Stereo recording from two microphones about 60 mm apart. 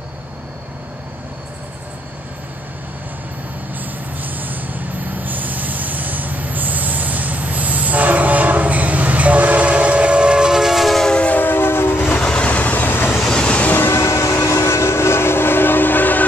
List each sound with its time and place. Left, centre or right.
3.7 s vehicle: right; by 11.1 s centre
11.1 s siren: centre
11.3 s train: left
12.2 s vehicle: centre; by 13.2 s left
13.2 s train: centre
13.7 s train: left